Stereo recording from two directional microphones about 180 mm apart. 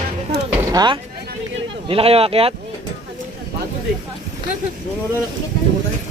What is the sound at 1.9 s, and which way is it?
Speech, 30° right (ahead or behind).